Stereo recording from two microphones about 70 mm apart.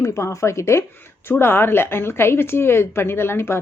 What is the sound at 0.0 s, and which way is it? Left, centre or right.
Speech, left.